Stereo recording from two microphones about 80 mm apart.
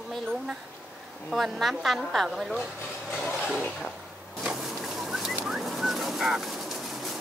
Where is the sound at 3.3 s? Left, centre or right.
Centre.